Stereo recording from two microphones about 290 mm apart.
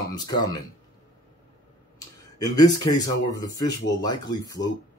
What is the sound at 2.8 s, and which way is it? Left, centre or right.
Speech, centre.